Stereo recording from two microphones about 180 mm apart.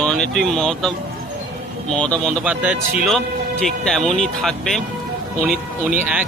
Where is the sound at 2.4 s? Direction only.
5° right (ahead or behind).